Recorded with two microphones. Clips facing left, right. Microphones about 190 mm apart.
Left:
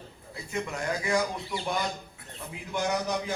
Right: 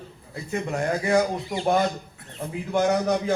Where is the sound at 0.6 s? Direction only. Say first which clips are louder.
Right 6 dB; 50° right (ahead or behind).